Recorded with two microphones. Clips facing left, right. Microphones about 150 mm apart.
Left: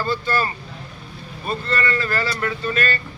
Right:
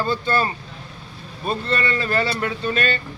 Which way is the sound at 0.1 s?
25° right (ahead or behind).